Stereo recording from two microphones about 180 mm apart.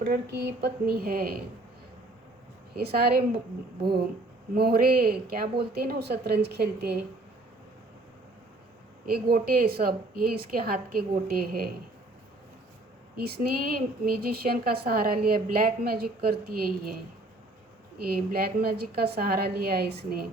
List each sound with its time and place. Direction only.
0.0 s speech: 70° right (ahead or behind)
2.7 s speech: 60° right (ahead or behind)
4.5 s speech: 60° right (ahead or behind)
9.3 s speech: 55° right (ahead or behind)
13.1 s speech: 60° right (ahead or behind)
18.0 s speech: 55° right (ahead or behind)